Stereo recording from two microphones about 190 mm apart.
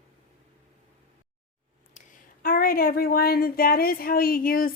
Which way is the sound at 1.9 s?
45° left (ahead or behind).